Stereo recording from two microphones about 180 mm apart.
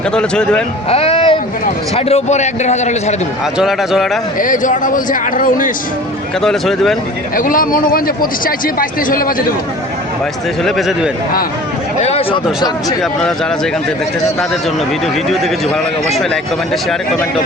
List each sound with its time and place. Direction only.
0.1 s a man's voice: 5° left (ahead or behind)
0.9 s a sound: 35° left (ahead or behind)
2.0 s a man's voice: 35° left (ahead or behind)
3.6 s a man's voice: centre (ahead or behind)
4.4 s a man's voice: 45° left (ahead or behind)
6.4 s a man's voice: centre (ahead or behind)
7.3 s a man's voice: 50° left (ahead or behind)
10.6 s a man's voice: centre (ahead or behind)
11.9 s speech: 35° left (ahead or behind)
15.3 s a man's voice: centre (ahead or behind)